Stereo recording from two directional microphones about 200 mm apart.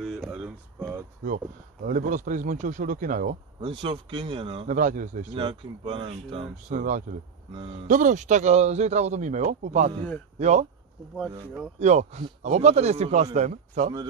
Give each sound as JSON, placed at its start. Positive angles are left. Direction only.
{"t": 0.0, "sound": "a sound", "side_deg": 0}
{"t": 1.2, "sound": "speech", "side_deg": -40}
{"t": 3.6, "sound": "speech", "side_deg": -25}
{"t": 4.6, "sound": "speech", "side_deg": -40}
{"t": 5.3, "sound": "speech", "side_deg": -25}
{"t": 6.8, "sound": "speech", "side_deg": -40}
{"t": 11.8, "sound": "speech", "side_deg": -35}